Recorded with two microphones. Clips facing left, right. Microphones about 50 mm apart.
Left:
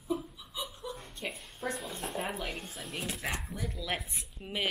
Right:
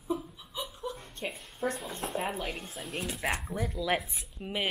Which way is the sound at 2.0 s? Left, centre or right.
Centre.